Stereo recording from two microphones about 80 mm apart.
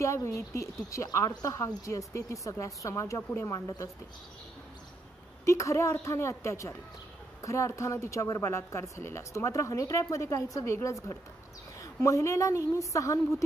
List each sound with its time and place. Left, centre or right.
0.0 s a woman's voice: left
5.4 s a woman's voice: left